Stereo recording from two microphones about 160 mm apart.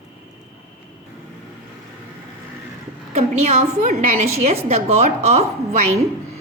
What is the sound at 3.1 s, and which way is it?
A woman's voice, 45° right (ahead or behind).